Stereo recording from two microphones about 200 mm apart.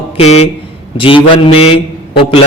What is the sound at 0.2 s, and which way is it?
A man's voice, 30° left (ahead or behind).